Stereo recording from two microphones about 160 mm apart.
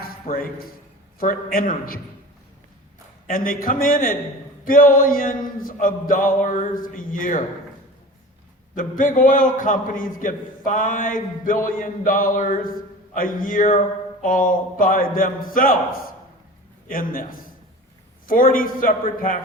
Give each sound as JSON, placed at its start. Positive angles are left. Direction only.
{"t": 0.0, "sound": "a man's voice", "side_deg": 65}
{"t": 3.2, "sound": "a man's voice", "side_deg": 60}
{"t": 8.7, "sound": "a man's voice", "side_deg": 55}
{"t": 16.9, "sound": "a man's voice", "side_deg": 60}